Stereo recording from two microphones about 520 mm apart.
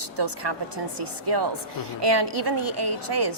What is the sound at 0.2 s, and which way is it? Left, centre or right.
A woman's voice, right.